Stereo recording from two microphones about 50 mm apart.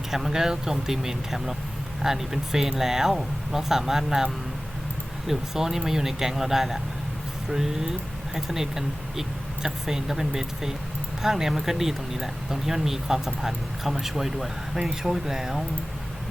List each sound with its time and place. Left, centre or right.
0.1 s speech: centre
5.3 s speech: centre
14.8 s speech: centre